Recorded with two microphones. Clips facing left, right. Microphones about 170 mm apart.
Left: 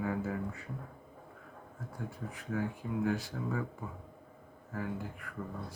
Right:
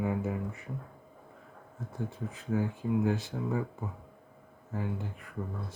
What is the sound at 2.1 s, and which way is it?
Speech, 25° right (ahead or behind).